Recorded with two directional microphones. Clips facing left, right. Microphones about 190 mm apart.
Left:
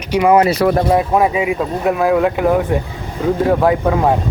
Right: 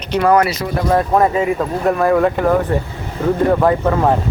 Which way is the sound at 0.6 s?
70° left (ahead or behind).